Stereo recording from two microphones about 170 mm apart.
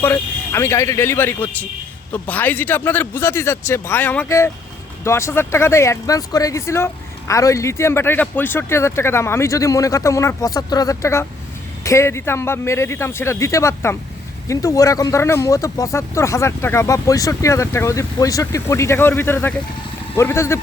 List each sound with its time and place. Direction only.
0.0 s speech: 15° left (ahead or behind)